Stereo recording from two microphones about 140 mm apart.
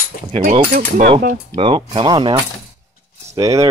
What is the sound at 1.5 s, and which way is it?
Speech, 40° right (ahead or behind).